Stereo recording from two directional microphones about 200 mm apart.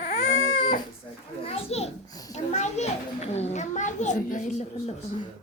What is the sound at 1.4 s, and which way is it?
A child's voice, 30° left (ahead or behind).